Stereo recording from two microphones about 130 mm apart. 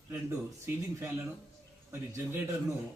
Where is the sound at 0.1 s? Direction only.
20° right (ahead or behind).